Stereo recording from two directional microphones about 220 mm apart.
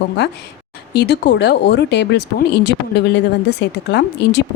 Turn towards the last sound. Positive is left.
turn(degrees=50)  # may be behind; listen again after turning